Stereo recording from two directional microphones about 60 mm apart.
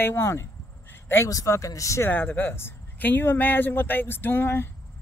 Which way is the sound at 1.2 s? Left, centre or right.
Left.